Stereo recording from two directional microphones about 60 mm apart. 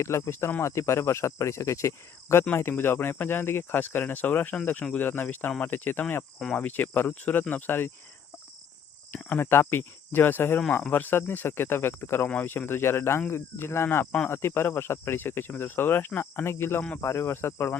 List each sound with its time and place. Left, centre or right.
0.0 s speech: left
2.6 s speech: left
9.1 s speech: left